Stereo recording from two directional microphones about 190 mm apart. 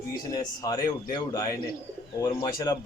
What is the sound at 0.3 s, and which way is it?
A man's voice, 20° left (ahead or behind).